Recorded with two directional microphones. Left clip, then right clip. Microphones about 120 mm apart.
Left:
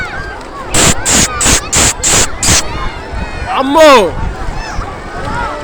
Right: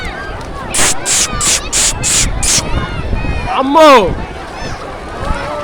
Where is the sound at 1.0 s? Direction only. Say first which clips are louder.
Left 3 dB; centre (ahead or behind).